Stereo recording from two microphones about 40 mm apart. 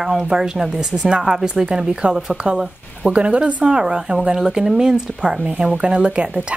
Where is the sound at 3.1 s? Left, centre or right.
Right.